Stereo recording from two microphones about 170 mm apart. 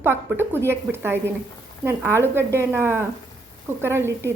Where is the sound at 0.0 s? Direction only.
15° right (ahead or behind).